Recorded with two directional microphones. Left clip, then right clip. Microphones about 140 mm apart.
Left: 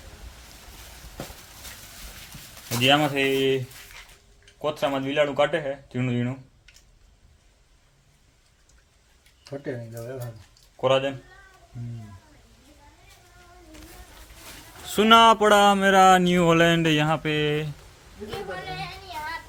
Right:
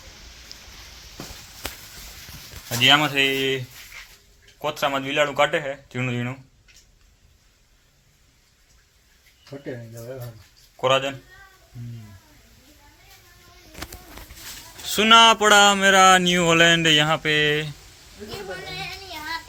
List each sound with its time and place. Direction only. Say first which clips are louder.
0.5 s a sound: right 8 dB; 30° left (ahead or behind)
2.6 s speech: right 3 dB; 5° left (ahead or behind)
4.6 s speech: right 2 dB; centre (ahead or behind)
10.8 s speech: right 1 dB; centre (ahead or behind)
14.8 s speech: right 2 dB; 25° left (ahead or behind); by 17.7 s 5° left (ahead or behind)